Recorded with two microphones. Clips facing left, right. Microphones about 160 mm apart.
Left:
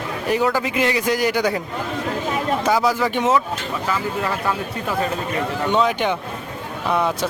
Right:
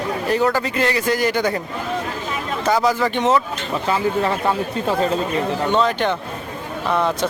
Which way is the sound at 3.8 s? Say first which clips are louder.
Right 5 dB; 30° right (ahead or behind).